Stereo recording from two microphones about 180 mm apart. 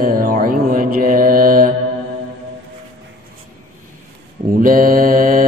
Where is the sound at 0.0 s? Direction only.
55° right (ahead or behind).